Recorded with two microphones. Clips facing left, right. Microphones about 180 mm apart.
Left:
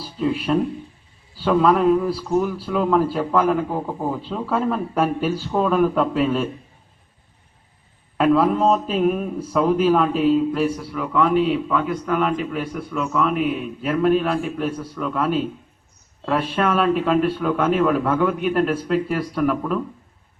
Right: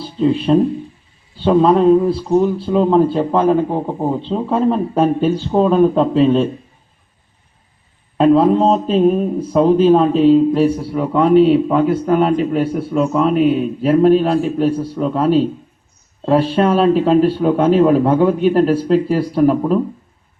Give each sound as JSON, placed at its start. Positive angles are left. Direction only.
{"t": 0.0, "sound": "a man's voice", "side_deg": -25}
{"t": 8.2, "sound": "a man's voice", "side_deg": -25}